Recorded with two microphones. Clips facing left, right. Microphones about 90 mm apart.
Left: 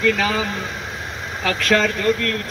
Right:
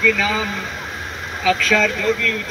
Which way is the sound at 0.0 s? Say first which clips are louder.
Even; 55° left (ahead or behind).